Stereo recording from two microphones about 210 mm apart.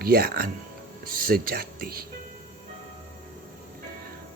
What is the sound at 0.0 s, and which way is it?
Speech, 45° right (ahead or behind).